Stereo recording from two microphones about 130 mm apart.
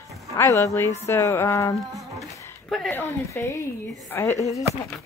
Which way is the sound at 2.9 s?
15° left (ahead or behind).